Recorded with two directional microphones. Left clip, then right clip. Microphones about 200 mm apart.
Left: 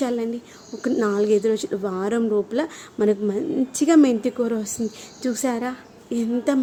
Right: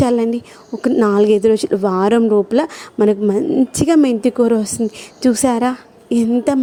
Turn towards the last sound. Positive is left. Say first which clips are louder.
# right 7 dB
turn(degrees=-35)  # may be behind; listen again after turning